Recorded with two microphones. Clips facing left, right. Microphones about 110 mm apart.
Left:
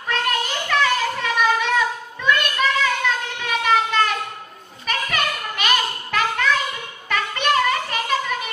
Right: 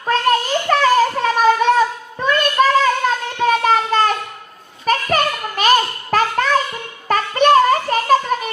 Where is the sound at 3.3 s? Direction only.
40° right (ahead or behind).